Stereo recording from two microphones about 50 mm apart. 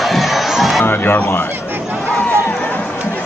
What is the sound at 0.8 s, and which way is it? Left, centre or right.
Speech, left.